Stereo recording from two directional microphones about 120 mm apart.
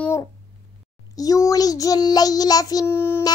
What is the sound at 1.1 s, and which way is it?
Child singing, 30° left (ahead or behind).